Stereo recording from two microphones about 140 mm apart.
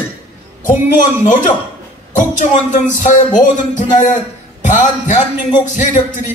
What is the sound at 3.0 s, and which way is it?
Speech, 60° left (ahead or behind).